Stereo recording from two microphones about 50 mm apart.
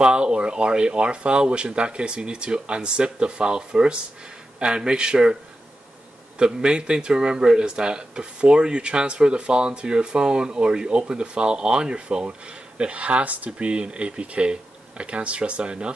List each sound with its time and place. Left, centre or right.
0.0 s speech: centre